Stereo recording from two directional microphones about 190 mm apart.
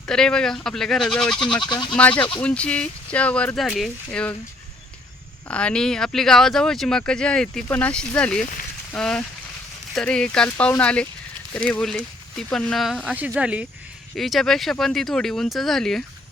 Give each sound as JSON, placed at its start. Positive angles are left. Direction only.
{"t": 0.0, "sound": "speech", "side_deg": 5}
{"t": 1.6, "sound": "speech", "side_deg": 25}
{"t": 2.0, "sound": "speech", "side_deg": 10}
{"t": 5.5, "sound": "speech", "side_deg": 5}